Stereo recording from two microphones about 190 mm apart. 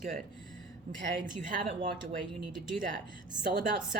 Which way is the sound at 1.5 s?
40° right (ahead or behind).